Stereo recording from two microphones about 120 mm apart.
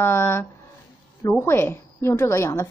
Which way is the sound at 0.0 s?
20° left (ahead or behind).